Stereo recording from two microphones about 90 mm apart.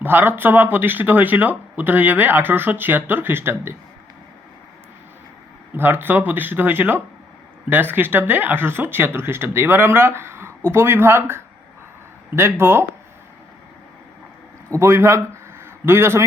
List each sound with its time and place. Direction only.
0.0 s speech: 20° right (ahead or behind)
5.7 s speech: 25° right (ahead or behind)
14.7 s a man's voice: 30° right (ahead or behind)